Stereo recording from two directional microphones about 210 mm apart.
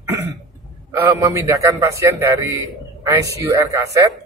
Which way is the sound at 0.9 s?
15° right (ahead or behind).